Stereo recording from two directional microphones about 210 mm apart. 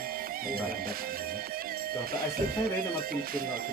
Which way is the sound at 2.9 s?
45° right (ahead or behind).